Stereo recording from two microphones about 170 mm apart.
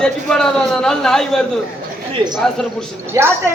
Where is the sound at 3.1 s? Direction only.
15° right (ahead or behind).